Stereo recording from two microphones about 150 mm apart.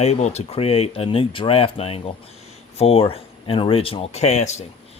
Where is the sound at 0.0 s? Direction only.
45° left (ahead or behind).